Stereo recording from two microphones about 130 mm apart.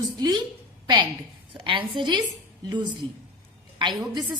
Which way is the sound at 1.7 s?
40° right (ahead or behind).